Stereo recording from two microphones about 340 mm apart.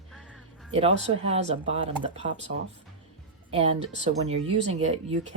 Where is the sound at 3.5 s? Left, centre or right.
Centre.